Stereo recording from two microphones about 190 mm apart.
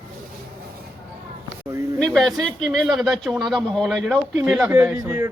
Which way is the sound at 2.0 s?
5° left (ahead or behind).